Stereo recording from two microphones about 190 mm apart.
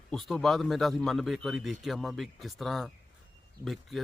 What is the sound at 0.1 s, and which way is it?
A man's voice, centre (ahead or behind).